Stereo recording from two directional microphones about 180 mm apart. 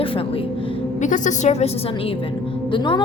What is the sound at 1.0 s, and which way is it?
Speech, 45° left (ahead or behind).